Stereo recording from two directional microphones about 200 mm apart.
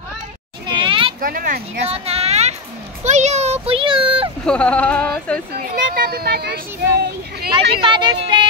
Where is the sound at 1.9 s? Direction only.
30° right (ahead or behind).